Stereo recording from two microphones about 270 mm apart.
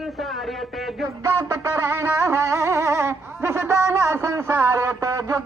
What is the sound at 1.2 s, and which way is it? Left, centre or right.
Music, centre.